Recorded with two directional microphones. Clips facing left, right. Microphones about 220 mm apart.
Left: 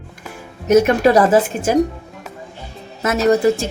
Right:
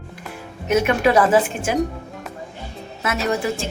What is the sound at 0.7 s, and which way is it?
Speech, 40° left (ahead or behind).